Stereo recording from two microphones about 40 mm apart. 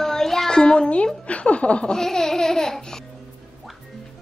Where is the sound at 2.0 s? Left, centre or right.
Centre.